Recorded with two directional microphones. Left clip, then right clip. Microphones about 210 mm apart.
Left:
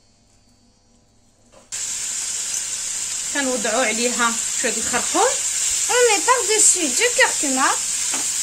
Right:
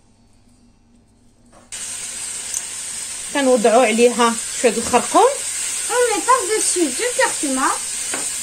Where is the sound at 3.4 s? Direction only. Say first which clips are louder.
Right 8 dB; 25° right (ahead or behind).